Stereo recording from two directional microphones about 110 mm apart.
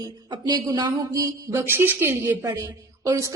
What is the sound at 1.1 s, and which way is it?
A woman's voice, 25° right (ahead or behind).